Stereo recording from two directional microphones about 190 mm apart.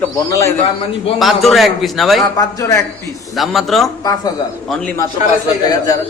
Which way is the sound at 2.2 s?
20° left (ahead or behind).